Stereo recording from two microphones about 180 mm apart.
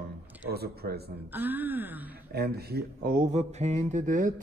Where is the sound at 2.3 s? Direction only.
60° right (ahead or behind).